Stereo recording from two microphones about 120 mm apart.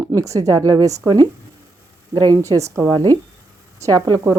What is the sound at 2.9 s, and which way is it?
A woman's voice, 35° right (ahead or behind).